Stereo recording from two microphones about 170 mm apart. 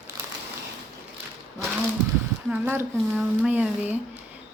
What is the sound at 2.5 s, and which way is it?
A woman's voice, 10° right (ahead or behind).